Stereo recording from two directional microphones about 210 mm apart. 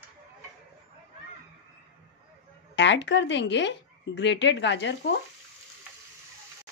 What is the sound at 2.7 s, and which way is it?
Speech, 60° left (ahead or behind).